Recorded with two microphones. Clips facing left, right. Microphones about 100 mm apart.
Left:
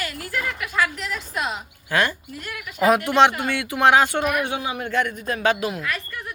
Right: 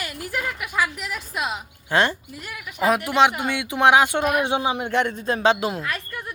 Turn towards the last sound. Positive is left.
turn(degrees=-30)  # may be behind; listen again after turning